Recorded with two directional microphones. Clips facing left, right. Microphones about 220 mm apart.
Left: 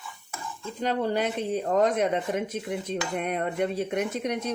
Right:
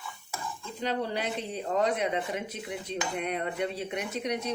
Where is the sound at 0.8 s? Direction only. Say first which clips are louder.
Left 5 dB; 50° left (ahead or behind).